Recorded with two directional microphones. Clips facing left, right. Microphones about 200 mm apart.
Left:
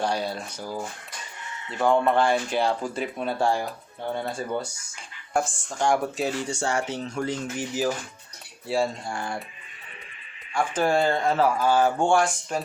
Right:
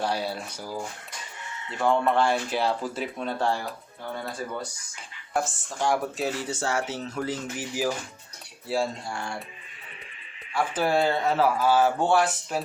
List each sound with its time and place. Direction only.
0.0 s speech: 5° right (ahead or behind)
1.8 s speech: centre (ahead or behind)
4.0 s speech: 25° left (ahead or behind)
5.3 s speech: centre (ahead or behind)
10.6 s speech: 5° right (ahead or behind)